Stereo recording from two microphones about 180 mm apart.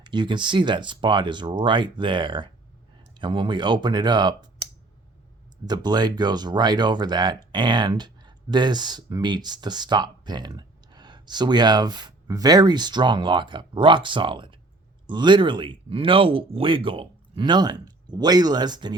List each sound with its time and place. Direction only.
0.0 s speech: 25° right (ahead or behind)
5.6 s speech: 25° right (ahead or behind)